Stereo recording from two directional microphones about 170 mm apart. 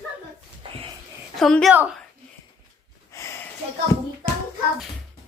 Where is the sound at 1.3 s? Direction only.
Centre (ahead or behind).